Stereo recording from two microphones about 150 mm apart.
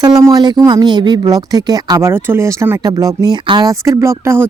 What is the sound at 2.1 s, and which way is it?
Speech, 15° right (ahead or behind).